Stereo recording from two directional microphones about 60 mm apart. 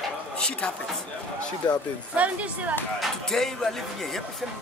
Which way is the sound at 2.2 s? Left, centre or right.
Right.